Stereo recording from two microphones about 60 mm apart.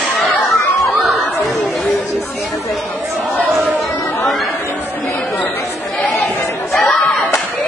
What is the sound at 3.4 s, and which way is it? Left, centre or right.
Chatter, centre.